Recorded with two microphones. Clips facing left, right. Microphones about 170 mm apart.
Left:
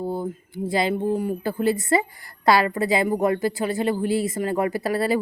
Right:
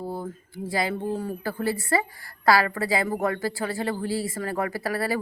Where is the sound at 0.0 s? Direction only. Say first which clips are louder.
Left 5 dB; 20° left (ahead or behind).